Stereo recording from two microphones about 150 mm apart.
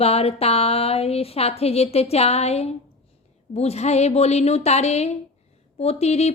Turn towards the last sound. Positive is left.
turn(degrees=45)  # may be behind; listen again after turning